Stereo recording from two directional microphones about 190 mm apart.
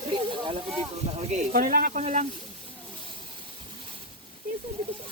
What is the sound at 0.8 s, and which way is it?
Speech, 35° right (ahead or behind).